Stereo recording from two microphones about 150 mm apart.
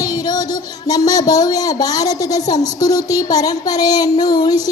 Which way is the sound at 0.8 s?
25° left (ahead or behind).